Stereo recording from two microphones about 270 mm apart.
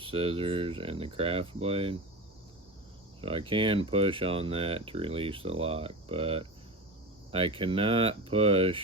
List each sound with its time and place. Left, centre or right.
0.0 s speech: centre
3.2 s speech: centre